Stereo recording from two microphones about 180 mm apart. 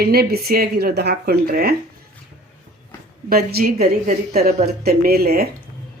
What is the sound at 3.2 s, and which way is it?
Speech, 55° right (ahead or behind).